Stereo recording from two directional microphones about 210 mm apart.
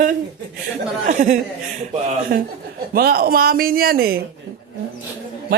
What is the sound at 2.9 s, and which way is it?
Speech, 45° right (ahead or behind).